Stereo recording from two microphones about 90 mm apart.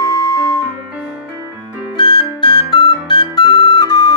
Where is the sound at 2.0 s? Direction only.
60° left (ahead or behind).